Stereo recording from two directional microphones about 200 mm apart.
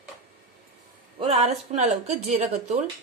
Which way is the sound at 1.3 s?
35° right (ahead or behind).